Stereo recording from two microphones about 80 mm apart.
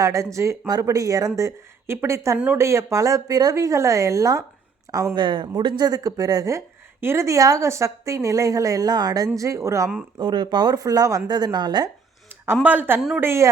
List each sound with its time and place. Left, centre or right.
0.0 s a woman's voice: right
5.1 s a woman's voice: right
7.0 s a woman's voice: right
10.2 s speech: right
12.6 s a woman's voice: right
13.1 s speech: right